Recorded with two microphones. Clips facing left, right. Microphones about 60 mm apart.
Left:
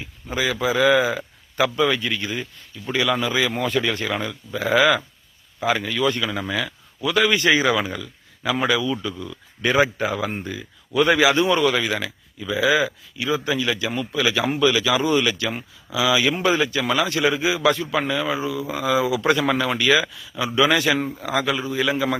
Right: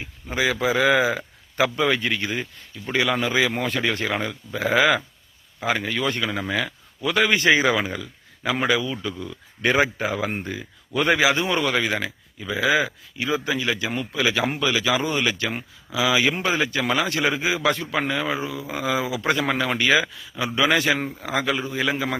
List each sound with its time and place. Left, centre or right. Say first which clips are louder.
0.0 s speech: right 1 dB; right
2.0 s speech: right 1 dB; right
2.3 s speech: right 1 dB; right
3.7 s speech: left 1 dB; right
6.2 s speech: even; centre
6.5 s speech: even; right
10.0 s speech: left 1 dB; right
11.2 s speech: left 3 dB; centre